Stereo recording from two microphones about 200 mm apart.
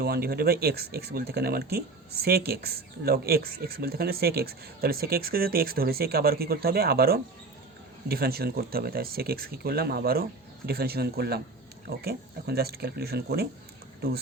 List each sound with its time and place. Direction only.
0.0 s speech: 50° right (ahead or behind)